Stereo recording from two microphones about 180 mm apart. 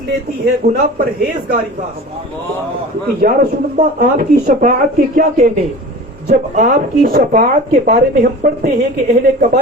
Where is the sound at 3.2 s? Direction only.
50° right (ahead or behind).